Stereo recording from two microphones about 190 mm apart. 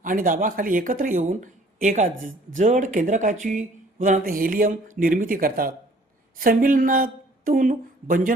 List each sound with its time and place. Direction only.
0.0 s speech: 45° right (ahead or behind)